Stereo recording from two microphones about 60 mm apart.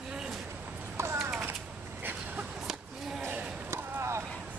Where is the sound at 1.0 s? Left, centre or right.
Right.